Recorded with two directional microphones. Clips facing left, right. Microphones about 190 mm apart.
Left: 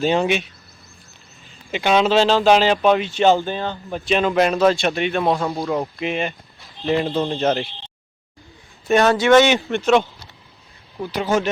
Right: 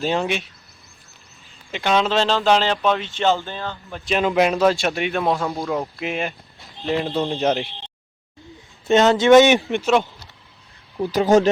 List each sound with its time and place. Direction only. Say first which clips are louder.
0.0 s a man's voice: left 4 dB; centre (ahead or behind)
1.7 s speech: left 3 dB; 5° left (ahead or behind)
4.2 s speech: right 1 dB; 10° right (ahead or behind)
4.6 s a man's voice: left 1 dB; centre (ahead or behind)
7.3 s speech: left 1 dB; 15° right (ahead or behind)
8.9 s speech: right 1 dB; 20° right (ahead or behind)
11.0 s speech: right 5 dB; 35° right (ahead or behind)